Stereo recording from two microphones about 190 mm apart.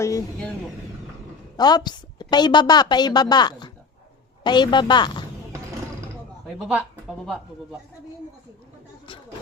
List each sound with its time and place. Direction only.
0.0 s speech: 15° left (ahead or behind)
1.5 s a woman's voice: 20° left (ahead or behind)
6.5 s a man's voice: 5° right (ahead or behind)